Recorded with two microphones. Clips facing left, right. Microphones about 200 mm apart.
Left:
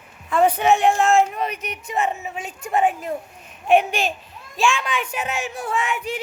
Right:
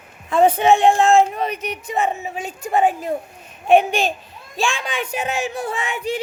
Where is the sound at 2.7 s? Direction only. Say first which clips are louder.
Right 2 dB; 35° right (ahead or behind).